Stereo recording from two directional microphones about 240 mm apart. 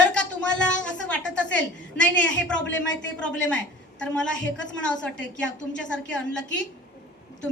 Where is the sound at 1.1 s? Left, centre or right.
Centre.